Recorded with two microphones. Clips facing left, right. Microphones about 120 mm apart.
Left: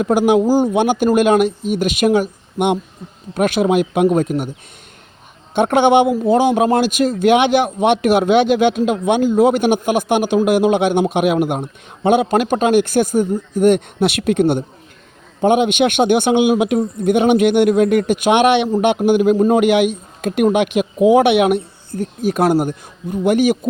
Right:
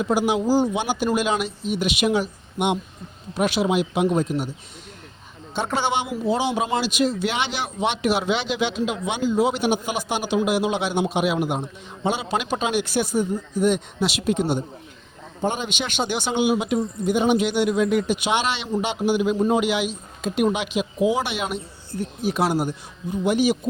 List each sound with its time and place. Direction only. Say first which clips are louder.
0.0 s a man's voice: left 7 dB; 55° left (ahead or behind)
5.5 s a man's voice: left 12 dB; 60° left (ahead or behind)
21.9 s a man's voice: left 6 dB; 45° left (ahead or behind)